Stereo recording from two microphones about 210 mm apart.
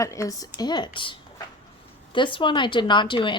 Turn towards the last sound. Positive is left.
turn(degrees=25)  # may be behind; listen again after turning